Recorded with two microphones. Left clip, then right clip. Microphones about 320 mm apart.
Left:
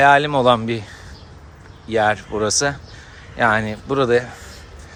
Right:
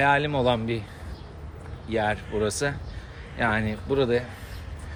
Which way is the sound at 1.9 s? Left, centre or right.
Centre.